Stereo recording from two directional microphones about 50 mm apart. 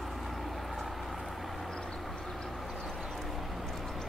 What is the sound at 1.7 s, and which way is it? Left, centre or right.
Vehicle, centre.